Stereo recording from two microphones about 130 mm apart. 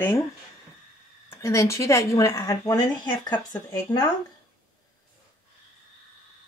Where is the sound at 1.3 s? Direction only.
20° left (ahead or behind).